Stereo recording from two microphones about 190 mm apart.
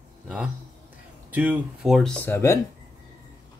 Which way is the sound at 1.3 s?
10° right (ahead or behind).